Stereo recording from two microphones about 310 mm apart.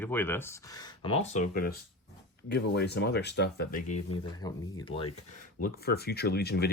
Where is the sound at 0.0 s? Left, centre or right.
Centre.